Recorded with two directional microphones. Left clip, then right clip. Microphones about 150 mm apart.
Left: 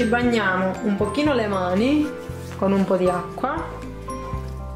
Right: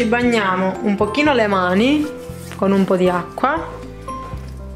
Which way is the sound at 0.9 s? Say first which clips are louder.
Right 7 dB; 25° right (ahead or behind).